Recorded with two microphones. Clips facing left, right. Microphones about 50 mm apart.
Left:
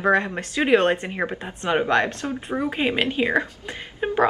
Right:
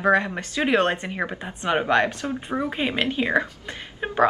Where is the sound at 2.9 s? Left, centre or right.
Left.